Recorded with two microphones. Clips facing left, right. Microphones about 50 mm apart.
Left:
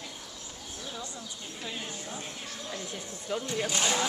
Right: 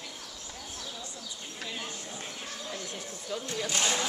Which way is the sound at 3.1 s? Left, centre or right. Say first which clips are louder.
Left 4 dB; left.